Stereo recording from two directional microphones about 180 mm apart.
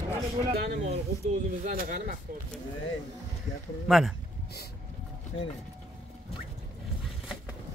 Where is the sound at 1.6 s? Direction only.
45° right (ahead or behind).